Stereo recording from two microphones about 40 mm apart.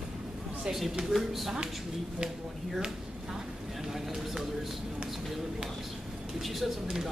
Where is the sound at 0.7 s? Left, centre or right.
Centre.